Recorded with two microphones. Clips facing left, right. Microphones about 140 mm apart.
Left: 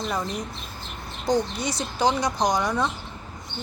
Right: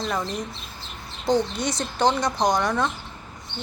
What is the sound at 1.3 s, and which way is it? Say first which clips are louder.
Speech: right 2 dB; 5° left (ahead or behind).